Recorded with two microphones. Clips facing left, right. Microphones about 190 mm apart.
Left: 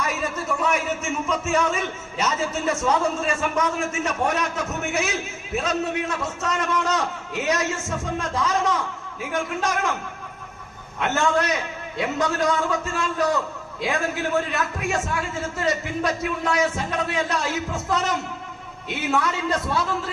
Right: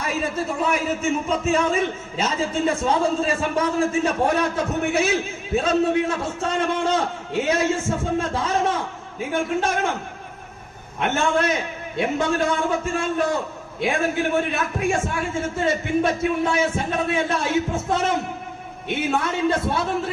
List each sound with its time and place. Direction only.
0.0 s a man's voice: 30° right (ahead or behind)
11.0 s a man's voice: 25° right (ahead or behind)